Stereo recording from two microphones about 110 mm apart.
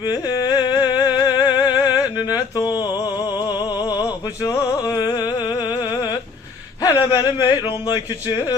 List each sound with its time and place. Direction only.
0.0 s music: 40° left (ahead or behind)
4.4 s a sound: 30° left (ahead or behind)
6.8 s speech: 35° left (ahead or behind)